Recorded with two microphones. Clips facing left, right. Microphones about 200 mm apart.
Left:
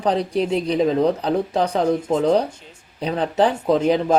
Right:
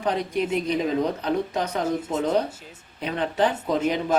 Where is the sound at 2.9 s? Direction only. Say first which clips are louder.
Left 5 dB; 35° left (ahead or behind).